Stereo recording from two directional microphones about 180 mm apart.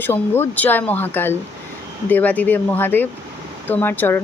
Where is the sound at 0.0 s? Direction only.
10° left (ahead or behind).